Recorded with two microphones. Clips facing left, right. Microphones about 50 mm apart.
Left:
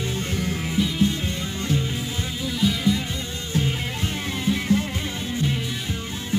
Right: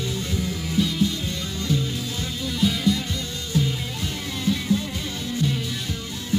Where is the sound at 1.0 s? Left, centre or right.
Left; by 2.8 s centre.